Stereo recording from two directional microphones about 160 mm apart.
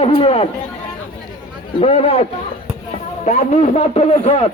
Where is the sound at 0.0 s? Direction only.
35° left (ahead or behind).